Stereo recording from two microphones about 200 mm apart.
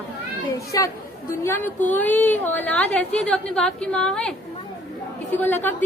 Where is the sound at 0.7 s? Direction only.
20° left (ahead or behind).